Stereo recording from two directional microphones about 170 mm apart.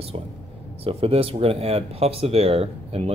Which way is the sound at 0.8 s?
35° right (ahead or behind).